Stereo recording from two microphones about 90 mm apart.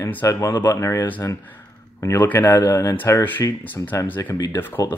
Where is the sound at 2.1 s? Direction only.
20° left (ahead or behind).